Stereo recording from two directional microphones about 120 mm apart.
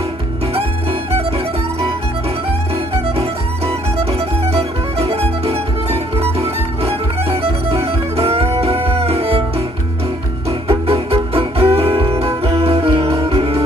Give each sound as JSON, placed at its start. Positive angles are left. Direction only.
{"t": 3.2, "sound": "music", "side_deg": -55}
{"t": 10.7, "sound": "music", "side_deg": -55}